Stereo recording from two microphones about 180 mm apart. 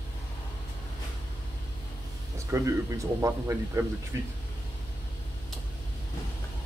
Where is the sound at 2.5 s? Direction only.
15° right (ahead or behind).